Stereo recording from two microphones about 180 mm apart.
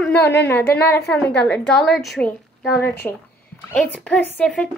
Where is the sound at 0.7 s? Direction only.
10° left (ahead or behind).